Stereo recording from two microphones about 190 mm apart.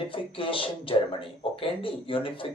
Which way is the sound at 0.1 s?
25° left (ahead or behind).